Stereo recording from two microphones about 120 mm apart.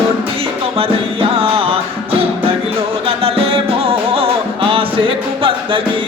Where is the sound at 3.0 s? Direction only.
50° right (ahead or behind).